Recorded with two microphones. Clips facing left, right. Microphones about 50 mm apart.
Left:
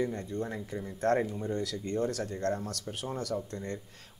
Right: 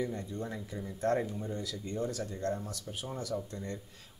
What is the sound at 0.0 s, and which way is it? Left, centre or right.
Speech, left.